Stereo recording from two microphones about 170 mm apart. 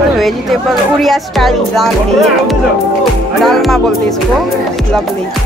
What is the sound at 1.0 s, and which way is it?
Music, centre (ahead or behind).